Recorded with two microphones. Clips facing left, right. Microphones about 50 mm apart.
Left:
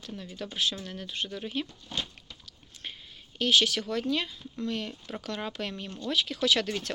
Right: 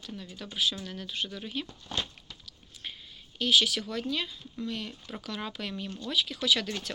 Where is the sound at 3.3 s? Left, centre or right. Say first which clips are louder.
Left 1 dB; left.